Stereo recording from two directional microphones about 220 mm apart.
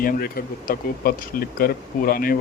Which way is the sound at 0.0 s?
40° left (ahead or behind).